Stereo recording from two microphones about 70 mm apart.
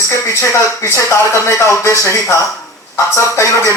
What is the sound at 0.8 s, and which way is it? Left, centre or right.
Speech, left.